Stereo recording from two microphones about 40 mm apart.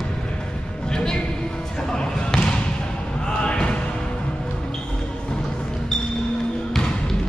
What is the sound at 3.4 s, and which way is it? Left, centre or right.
Music, left.